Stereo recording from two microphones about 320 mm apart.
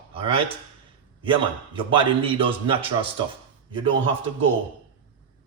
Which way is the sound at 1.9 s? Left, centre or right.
Centre.